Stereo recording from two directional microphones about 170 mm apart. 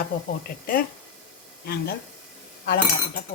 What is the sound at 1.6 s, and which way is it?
Speech, 65° left (ahead or behind).